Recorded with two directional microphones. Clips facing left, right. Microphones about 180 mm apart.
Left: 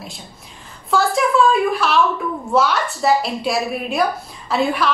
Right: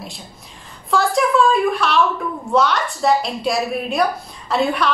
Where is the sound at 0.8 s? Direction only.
Centre (ahead or behind).